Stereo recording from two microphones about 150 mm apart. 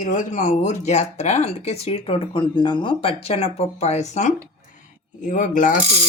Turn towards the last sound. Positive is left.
turn(degrees=60)  # may be behind; listen again after turning